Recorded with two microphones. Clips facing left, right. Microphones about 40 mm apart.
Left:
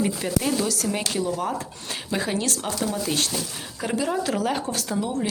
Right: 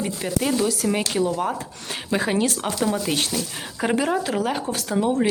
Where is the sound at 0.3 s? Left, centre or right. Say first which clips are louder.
Right 7 dB; centre; by 4.1 s right.